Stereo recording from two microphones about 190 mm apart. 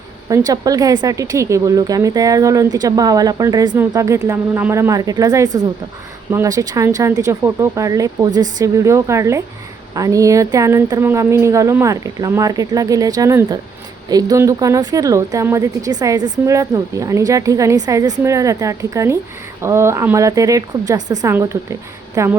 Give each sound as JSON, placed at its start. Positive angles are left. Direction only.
{"t": 0.3, "sound": "a woman's voice", "side_deg": -20}